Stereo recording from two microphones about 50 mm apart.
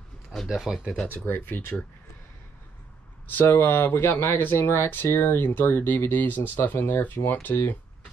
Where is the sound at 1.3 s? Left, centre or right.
Left.